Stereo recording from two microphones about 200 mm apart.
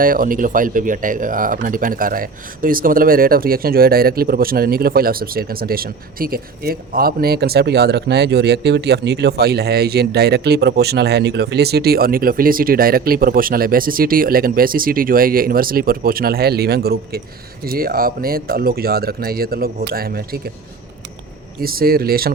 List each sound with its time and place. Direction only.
0.0 s speech: 45° right (ahead or behind)
21.6 s speech: 50° right (ahead or behind)